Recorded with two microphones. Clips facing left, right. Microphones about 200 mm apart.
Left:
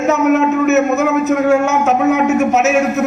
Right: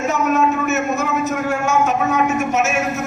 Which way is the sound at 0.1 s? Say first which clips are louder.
Left 6 dB; 65° left (ahead or behind).